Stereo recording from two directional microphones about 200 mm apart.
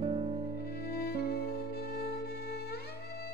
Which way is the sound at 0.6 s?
50° left (ahead or behind).